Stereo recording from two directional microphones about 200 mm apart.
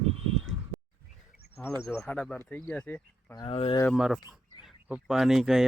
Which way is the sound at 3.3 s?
25° left (ahead or behind).